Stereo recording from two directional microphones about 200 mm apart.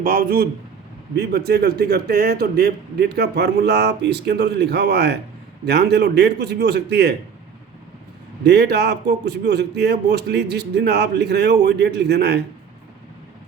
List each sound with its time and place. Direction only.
0.0 s a man's voice: 45° right (ahead or behind)
8.4 s speech: 55° right (ahead or behind)